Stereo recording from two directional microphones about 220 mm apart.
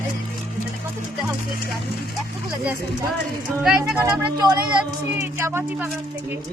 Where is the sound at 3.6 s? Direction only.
Centre (ahead or behind).